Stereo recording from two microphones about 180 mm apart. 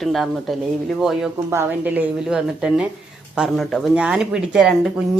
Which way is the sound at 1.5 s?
10° right (ahead or behind).